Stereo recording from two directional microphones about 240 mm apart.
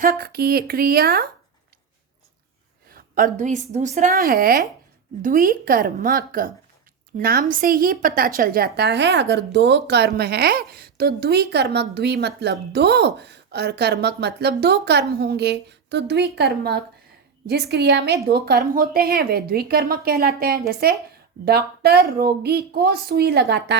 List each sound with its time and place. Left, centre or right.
0.0 s a woman's voice: right
2.9 s a woman's voice: right